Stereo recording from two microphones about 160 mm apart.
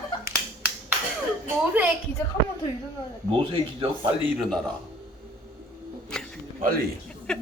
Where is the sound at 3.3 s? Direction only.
35° right (ahead or behind).